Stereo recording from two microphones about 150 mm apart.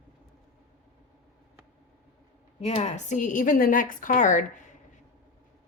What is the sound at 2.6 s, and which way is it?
A woman's voice, 45° left (ahead or behind).